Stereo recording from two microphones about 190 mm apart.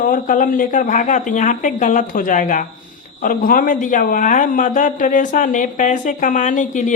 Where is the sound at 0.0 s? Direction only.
45° left (ahead or behind).